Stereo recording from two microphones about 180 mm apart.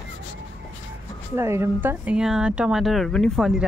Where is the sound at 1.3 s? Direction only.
15° right (ahead or behind).